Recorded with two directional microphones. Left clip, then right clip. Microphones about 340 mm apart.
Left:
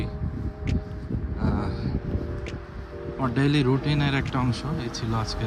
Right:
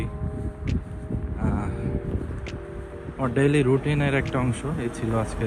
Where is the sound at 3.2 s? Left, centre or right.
Centre.